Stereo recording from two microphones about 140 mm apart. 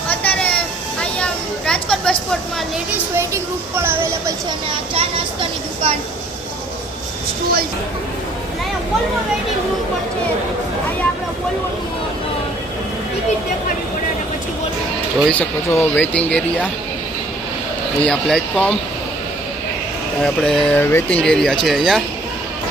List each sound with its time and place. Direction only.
0.1 s a sound: 10° left (ahead or behind)
3.2 s speech: 15° right (ahead or behind)
4.7 s speech: 40° right (ahead or behind)
15.3 s speech: 10° left (ahead or behind)
18.0 s speech: 5° left (ahead or behind)
20.2 s speech: 5° left (ahead or behind)
20.7 s speech: 15° left (ahead or behind)